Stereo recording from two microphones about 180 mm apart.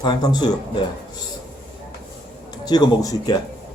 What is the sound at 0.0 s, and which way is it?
Speech, 25° left (ahead or behind).